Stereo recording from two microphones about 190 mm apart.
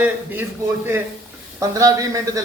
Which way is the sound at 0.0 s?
10° right (ahead or behind).